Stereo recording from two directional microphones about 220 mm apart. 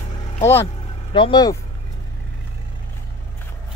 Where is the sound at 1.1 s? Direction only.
20° left (ahead or behind).